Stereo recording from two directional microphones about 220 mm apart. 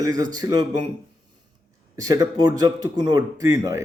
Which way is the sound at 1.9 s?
15° right (ahead or behind).